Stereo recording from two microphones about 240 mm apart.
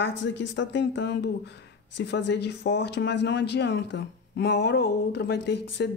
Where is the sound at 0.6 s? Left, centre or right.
Left.